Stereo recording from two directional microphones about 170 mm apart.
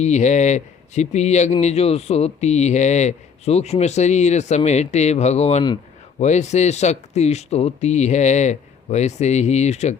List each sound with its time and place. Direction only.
0.0 s speech: 45° left (ahead or behind)